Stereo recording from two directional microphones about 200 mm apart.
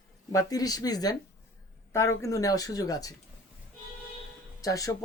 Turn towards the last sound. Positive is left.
turn(degrees=15)  # may be behind; listen again after turning